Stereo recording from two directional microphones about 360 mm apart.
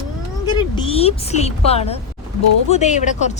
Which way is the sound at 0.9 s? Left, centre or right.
Centre.